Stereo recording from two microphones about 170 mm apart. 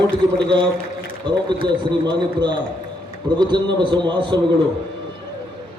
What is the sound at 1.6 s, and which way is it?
A man's voice, 25° right (ahead or behind).